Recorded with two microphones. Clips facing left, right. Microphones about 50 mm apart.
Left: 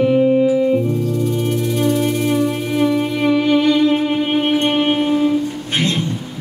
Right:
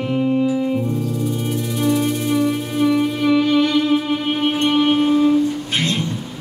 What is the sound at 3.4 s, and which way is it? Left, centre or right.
Music, left.